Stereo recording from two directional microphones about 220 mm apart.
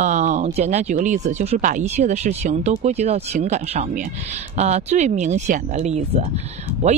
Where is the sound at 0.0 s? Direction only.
35° right (ahead or behind).